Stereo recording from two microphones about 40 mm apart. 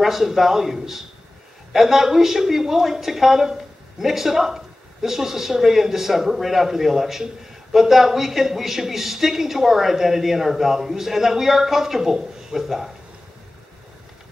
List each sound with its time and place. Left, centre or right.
0.0 s a woman's voice: centre